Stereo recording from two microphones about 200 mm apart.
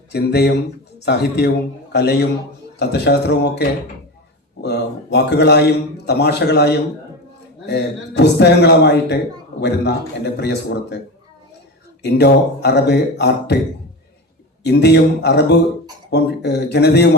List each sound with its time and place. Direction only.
0.1 s a man's voice: 55° left (ahead or behind)
12.0 s a man's voice: 55° left (ahead or behind)
14.6 s a man's voice: 55° left (ahead or behind)